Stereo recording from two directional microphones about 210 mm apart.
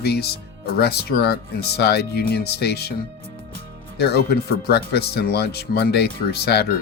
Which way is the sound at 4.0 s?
50° left (ahead or behind).